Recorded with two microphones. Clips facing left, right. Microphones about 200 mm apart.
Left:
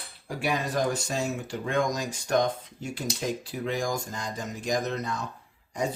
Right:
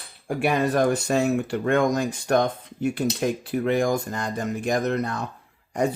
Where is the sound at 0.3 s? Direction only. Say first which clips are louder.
Right 7 dB; 60° right (ahead or behind).